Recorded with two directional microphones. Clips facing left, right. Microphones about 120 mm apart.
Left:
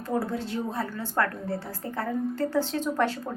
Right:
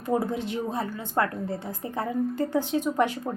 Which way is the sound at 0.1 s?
20° right (ahead or behind).